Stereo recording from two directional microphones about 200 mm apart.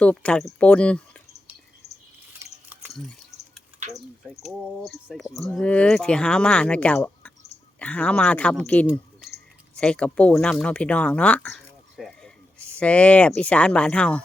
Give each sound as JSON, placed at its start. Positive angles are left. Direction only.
{"t": 0.0, "sound": "speech", "side_deg": 5}
{"t": 1.8, "sound": "drip", "side_deg": 30}
{"t": 2.4, "sound": "a sound", "side_deg": -10}
{"t": 2.9, "sound": "speech", "side_deg": 0}